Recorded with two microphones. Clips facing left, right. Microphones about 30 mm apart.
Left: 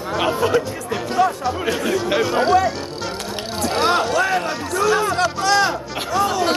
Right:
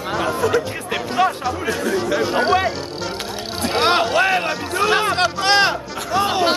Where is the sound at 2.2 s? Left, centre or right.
Right.